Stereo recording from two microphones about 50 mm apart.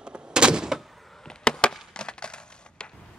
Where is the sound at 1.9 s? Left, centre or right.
Centre.